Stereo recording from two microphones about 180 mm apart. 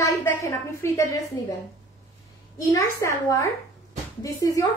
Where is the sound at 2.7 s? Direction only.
15° left (ahead or behind).